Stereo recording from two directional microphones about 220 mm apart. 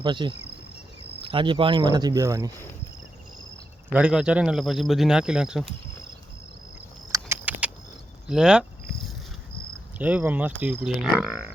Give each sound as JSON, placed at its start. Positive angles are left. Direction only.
{"t": 0.0, "sound": "speech", "side_deg": -20}
{"t": 3.9, "sound": "speech", "side_deg": -5}
{"t": 7.1, "sound": "a sound", "side_deg": -10}
{"t": 8.3, "sound": "speech", "side_deg": -5}
{"t": 10.0, "sound": "speech", "side_deg": -5}